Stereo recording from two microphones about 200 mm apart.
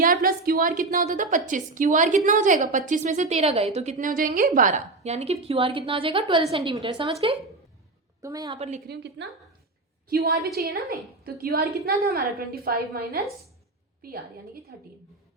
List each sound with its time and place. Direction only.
0.0 s a woman's voice: 45° right (ahead or behind); by 8.5 s 15° right (ahead or behind)
8.5 s a woman's voice: 30° right (ahead or behind)
8.9 s a woman's voice: 60° right (ahead or behind)